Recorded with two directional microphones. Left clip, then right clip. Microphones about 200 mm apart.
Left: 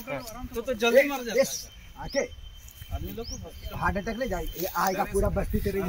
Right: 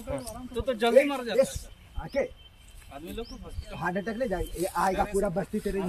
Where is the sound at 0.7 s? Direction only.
10° left (ahead or behind).